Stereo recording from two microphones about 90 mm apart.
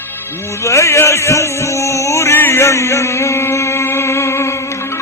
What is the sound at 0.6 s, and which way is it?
Music, 35° left (ahead or behind).